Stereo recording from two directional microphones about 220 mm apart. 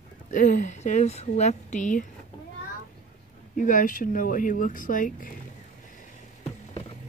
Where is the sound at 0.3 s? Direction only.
35° left (ahead or behind).